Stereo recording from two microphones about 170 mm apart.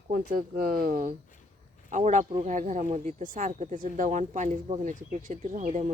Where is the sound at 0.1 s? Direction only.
55° right (ahead or behind).